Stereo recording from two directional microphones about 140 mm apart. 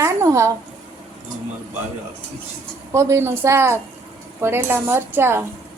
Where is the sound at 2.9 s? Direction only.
20° right (ahead or behind).